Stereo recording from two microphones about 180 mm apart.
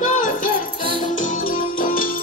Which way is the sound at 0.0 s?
50° left (ahead or behind).